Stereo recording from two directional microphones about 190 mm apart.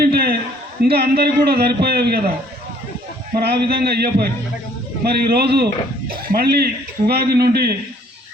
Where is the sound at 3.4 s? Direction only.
60° right (ahead or behind).